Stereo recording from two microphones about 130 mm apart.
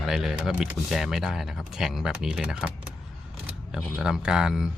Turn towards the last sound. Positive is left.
turn(degrees=-5)  # may be behind; listen again after turning